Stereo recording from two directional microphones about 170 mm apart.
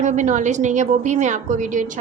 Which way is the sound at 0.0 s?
45° right (ahead or behind).